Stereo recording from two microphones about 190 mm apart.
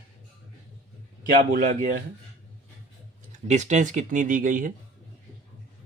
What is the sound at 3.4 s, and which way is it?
Speech, 40° right (ahead or behind).